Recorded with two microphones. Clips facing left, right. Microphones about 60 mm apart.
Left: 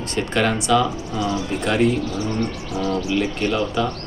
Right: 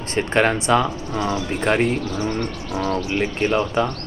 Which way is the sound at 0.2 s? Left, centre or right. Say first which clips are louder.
Right 2 dB; right.